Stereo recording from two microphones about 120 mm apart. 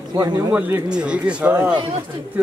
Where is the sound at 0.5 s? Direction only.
15° right (ahead or behind).